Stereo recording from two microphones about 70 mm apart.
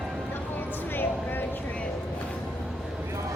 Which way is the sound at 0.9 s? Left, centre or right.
Left.